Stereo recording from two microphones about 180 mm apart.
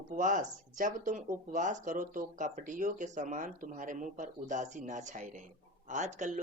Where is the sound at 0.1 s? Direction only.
45° right (ahead or behind).